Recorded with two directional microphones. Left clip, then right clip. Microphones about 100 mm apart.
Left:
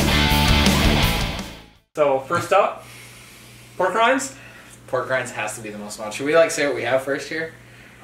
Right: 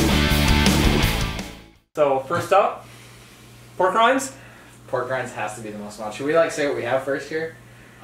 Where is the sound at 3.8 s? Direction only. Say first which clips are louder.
Right 1 dB; 5° right (ahead or behind).